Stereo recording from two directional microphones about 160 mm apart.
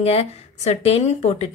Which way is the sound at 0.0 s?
40° left (ahead or behind).